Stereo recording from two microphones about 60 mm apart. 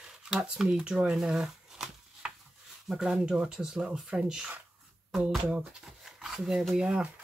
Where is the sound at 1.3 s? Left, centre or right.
Centre.